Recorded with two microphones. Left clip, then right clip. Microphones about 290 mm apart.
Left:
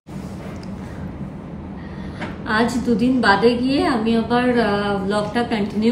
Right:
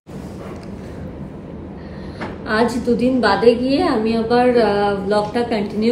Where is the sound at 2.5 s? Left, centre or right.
Centre.